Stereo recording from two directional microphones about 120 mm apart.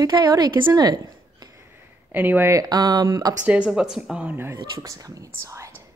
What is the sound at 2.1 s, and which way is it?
Speech, 15° right (ahead or behind).